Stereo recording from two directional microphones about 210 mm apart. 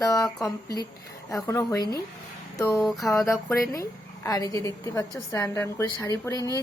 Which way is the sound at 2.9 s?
Centre (ahead or behind).